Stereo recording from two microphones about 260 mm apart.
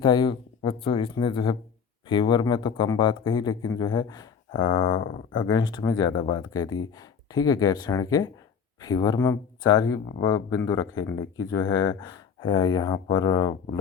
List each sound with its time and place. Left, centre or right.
0.0 s speech: centre